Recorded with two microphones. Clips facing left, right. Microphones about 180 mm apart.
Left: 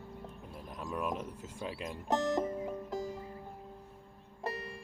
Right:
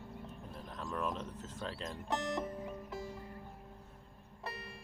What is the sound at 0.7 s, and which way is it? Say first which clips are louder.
Bird: left 2 dB; 10° left (ahead or behind).